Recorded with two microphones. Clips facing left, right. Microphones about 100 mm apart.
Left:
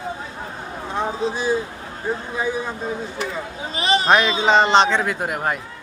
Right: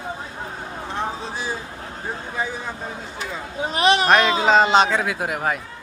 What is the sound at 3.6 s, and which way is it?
Speech, 70° right (ahead or behind).